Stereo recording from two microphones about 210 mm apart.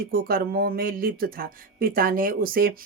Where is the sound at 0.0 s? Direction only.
45° right (ahead or behind).